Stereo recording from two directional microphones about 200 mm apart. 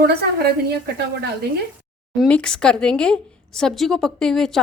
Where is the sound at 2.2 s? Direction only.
5° left (ahead or behind).